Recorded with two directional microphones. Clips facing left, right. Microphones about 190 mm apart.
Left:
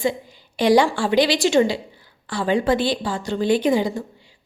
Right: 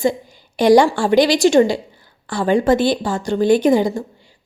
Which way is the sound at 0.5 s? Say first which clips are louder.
Right 4 dB; 45° right (ahead or behind).